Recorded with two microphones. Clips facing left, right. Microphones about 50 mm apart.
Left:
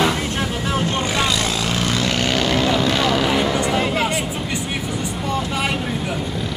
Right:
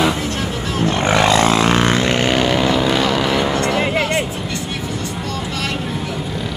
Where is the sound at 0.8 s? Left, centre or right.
Right.